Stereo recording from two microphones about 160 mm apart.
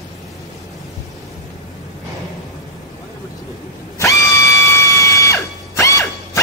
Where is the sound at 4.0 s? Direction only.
20° left (ahead or behind).